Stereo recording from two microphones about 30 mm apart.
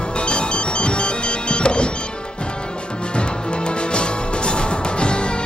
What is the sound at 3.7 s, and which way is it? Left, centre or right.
Music, left.